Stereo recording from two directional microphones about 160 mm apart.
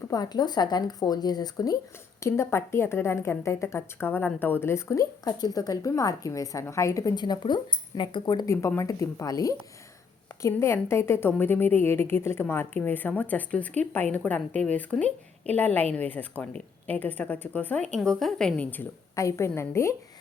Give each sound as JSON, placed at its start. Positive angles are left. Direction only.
{"t": 0.1, "sound": "a woman's voice", "side_deg": 25}